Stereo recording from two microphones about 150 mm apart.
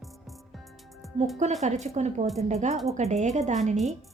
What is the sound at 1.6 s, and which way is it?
Speech, 50° right (ahead or behind).